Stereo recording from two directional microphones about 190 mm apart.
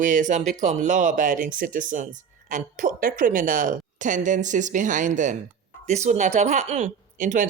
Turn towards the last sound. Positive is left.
turn(degrees=-40)  # may be behind; listen again after turning